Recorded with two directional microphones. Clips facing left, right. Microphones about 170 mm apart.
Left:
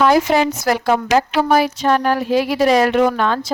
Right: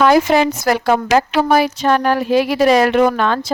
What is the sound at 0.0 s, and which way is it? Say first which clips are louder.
A woman's voice: right 2 dB; 75° right (ahead or behind).